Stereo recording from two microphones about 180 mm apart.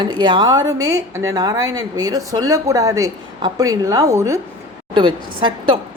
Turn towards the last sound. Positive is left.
turn(degrees=-25)  # may be behind; listen again after turning